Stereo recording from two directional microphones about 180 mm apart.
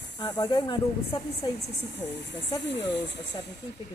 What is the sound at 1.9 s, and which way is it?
Speech, 75° left (ahead or behind).